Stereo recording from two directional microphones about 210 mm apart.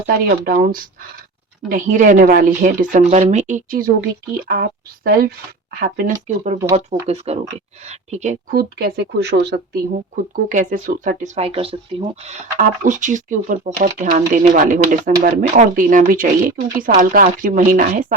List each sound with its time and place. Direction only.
0.3 s a woman's voice: 40° right (ahead or behind)
10.5 s speech: 40° right (ahead or behind)